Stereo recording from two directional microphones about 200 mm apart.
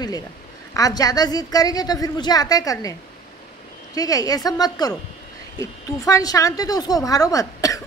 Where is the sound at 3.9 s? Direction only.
20° left (ahead or behind).